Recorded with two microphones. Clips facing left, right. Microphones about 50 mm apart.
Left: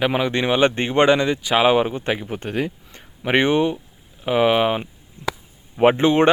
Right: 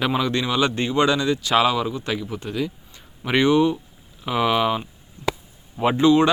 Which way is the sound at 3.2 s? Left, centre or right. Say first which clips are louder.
Even; left.